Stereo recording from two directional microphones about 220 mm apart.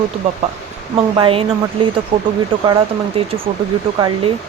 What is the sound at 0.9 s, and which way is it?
Speech, 25° right (ahead or behind).